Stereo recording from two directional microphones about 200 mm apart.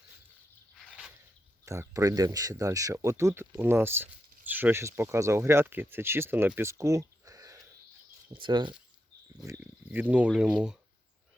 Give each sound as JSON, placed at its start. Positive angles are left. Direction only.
{"t": 0.7, "sound": "a sound", "side_deg": 0}
{"t": 1.6, "sound": "speech", "side_deg": -15}
{"t": 9.4, "sound": "speech", "side_deg": -10}